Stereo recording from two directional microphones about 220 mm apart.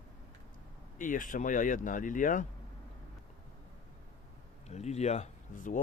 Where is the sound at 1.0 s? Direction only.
35° left (ahead or behind).